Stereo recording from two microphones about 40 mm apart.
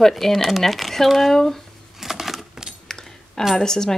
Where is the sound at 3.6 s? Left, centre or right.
Centre.